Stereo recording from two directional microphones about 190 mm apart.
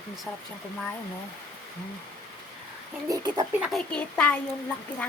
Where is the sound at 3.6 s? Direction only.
Centre (ahead or behind).